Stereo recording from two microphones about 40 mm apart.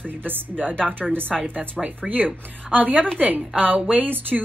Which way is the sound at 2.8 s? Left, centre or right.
Right.